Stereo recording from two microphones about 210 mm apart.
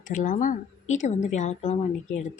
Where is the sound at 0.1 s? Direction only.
35° left (ahead or behind).